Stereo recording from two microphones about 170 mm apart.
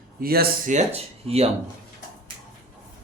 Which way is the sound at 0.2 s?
65° right (ahead or behind).